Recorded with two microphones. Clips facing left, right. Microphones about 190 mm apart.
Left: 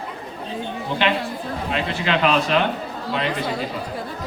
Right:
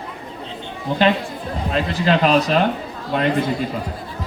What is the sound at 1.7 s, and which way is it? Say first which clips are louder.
Speech: right 5 dB; 40° right (ahead or behind).